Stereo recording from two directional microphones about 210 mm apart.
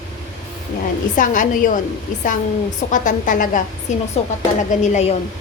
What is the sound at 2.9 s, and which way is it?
A woman's voice, 35° left (ahead or behind).